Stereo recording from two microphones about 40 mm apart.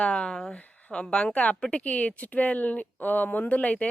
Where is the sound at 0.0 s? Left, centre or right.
Left.